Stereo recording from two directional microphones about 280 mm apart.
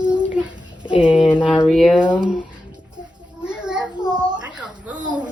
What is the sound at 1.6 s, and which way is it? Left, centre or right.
Speech, centre.